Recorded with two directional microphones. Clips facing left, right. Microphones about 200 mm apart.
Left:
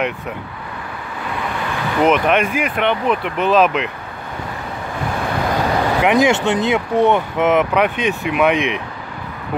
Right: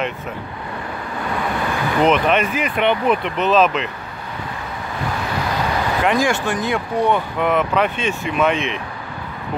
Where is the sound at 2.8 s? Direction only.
Centre (ahead or behind).